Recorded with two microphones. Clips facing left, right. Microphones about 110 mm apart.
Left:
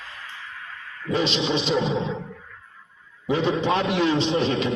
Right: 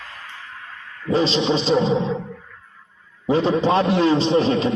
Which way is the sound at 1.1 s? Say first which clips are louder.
Right 4 dB; 35° right (ahead or behind).